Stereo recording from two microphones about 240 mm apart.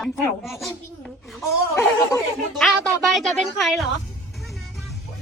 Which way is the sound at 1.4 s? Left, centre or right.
Centre.